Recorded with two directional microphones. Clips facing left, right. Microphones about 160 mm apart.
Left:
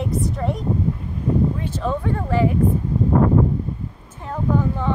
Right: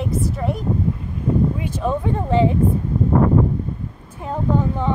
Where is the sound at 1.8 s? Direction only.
20° right (ahead or behind).